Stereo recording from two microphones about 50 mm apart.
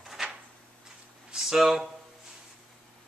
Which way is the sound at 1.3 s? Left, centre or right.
Centre.